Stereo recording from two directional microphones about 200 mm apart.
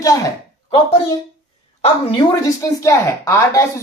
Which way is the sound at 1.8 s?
30° left (ahead or behind).